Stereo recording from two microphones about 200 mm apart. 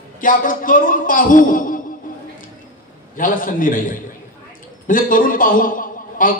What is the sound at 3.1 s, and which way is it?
A man's voice, 40° left (ahead or behind).